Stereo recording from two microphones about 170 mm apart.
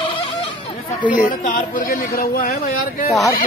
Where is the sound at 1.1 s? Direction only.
50° left (ahead or behind).